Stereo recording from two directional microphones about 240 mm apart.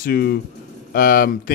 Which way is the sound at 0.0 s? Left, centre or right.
Left.